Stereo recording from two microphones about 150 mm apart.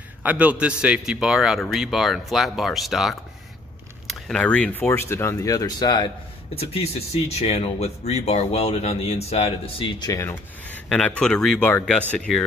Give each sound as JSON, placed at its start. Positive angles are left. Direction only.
{"t": 0.2, "sound": "speech", "side_deg": -10}
{"t": 6.5, "sound": "speech", "side_deg": 40}
{"t": 10.2, "sound": "speech", "side_deg": 10}